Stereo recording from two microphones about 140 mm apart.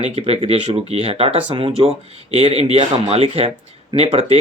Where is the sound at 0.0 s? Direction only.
45° right (ahead or behind).